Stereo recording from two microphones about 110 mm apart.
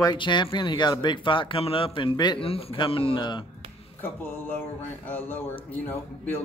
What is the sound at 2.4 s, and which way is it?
Speech, 60° left (ahead or behind).